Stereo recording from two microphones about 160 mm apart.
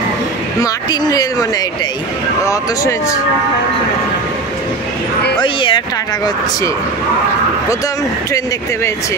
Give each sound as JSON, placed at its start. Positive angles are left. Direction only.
{"t": 0.6, "sound": "speech", "side_deg": 25}
{"t": 5.4, "sound": "speech", "side_deg": 30}